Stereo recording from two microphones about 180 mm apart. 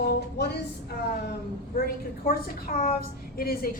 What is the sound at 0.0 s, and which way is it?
Speech, 65° left (ahead or behind).